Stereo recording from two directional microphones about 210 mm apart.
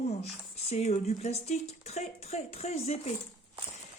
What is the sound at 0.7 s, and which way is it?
Speech, 30° left (ahead or behind).